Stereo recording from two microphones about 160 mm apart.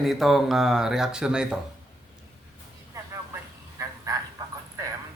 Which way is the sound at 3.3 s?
20° right (ahead or behind).